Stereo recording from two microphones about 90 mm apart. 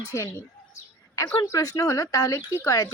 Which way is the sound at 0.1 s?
35° left (ahead or behind).